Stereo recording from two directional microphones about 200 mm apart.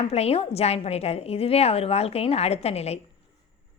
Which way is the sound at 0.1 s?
30° left (ahead or behind).